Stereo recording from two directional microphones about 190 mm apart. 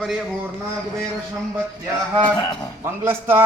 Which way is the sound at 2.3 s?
20° left (ahead or behind).